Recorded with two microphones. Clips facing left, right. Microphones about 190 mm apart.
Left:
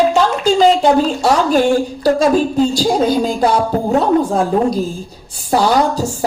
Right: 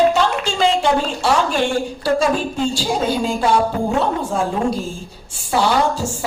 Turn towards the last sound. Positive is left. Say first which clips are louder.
# left 4 dB
turn(degrees=40)  # may be behind; listen again after turning